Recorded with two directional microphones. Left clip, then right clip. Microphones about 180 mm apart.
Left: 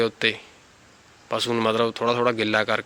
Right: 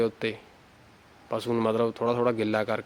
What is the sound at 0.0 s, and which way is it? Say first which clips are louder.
A man's voice: left 5 dB; 5° right (ahead or behind).